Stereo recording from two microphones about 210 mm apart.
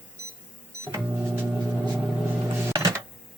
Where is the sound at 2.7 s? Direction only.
15° right (ahead or behind).